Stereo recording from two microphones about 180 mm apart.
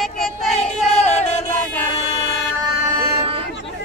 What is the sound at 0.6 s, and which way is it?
Music, 35° left (ahead or behind).